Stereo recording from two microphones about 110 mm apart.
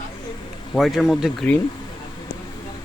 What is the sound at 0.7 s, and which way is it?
Speech, centre (ahead or behind).